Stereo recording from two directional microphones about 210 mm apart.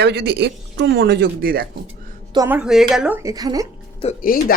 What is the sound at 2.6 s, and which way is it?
Speech, centre (ahead or behind).